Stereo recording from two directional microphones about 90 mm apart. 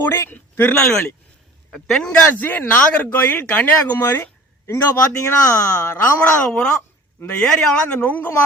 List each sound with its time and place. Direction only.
0.0 s speech: 25° left (ahead or behind)
0.7 s speech: 10° left (ahead or behind); by 6.1 s 30° left (ahead or behind)
6.2 s speech: 10° left (ahead or behind)